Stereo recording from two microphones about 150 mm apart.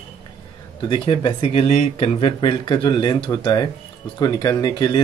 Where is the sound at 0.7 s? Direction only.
35° left (ahead or behind).